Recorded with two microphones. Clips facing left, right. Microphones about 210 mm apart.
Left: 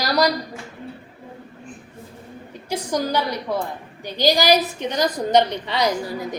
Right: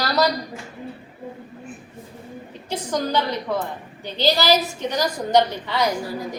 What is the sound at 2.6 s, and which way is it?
A woman's voice, 10° left (ahead or behind).